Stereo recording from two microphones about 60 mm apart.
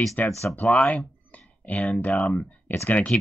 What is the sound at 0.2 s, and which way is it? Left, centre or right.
Speech, left.